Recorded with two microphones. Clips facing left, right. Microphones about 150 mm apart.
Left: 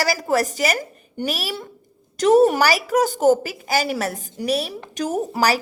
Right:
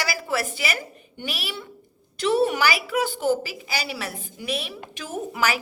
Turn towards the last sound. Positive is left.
turn(degrees=40)  # may be behind; listen again after turning